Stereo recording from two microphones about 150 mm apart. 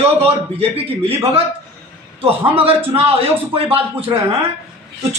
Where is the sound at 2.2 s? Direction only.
40° right (ahead or behind).